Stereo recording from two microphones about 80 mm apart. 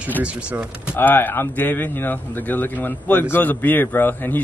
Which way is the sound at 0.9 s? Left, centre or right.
Left.